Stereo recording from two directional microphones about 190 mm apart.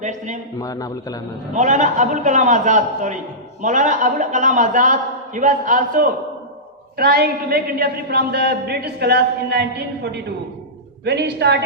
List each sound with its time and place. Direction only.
0.0 s a man's voice: 40° right (ahead or behind)
0.6 s a man's voice: 20° left (ahead or behind)
1.5 s a man's voice: 40° right (ahead or behind); by 11.6 s 60° right (ahead or behind)